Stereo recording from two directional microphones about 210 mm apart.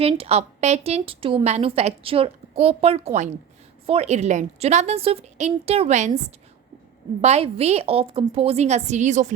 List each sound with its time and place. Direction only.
0.0 s a woman's voice: 30° right (ahead or behind)
7.2 s a woman's voice: 30° right (ahead or behind)